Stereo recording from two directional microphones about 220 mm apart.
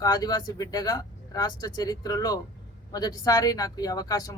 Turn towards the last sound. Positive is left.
turn(degrees=15)  # may be behind; listen again after turning